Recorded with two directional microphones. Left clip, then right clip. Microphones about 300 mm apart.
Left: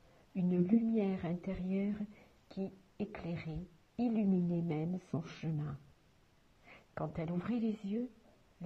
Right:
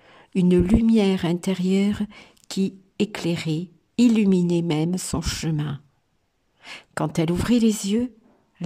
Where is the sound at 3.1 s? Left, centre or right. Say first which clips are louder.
Right 18 dB; centre.